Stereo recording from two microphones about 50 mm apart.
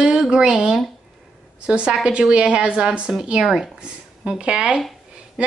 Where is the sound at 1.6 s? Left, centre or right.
Centre.